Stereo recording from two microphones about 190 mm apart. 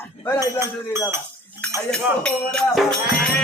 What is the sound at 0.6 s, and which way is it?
Speech, 15° right (ahead or behind).